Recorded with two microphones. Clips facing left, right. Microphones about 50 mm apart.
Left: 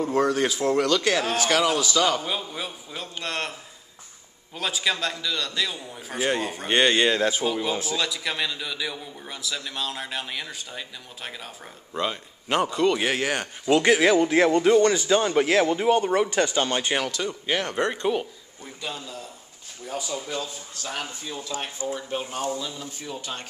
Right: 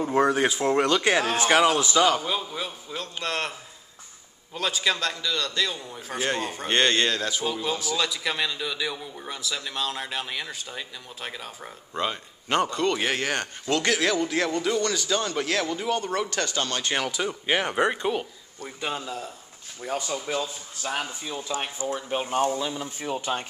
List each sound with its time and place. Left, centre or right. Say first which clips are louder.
0.0 s speech: right 1 dB; centre
2.2 s a man's voice: right 1 dB; centre
4.6 s a man's voice: even; centre
7.1 s a man's voice: left 5 dB; left
7.9 s a man's voice: right 1 dB; centre
13.7 s a man's voice: left 6 dB; centre
17.1 s speech: right 1 dB; centre
18.8 s a man's voice: right 4 dB; right
20.2 s speech: right 3 dB; centre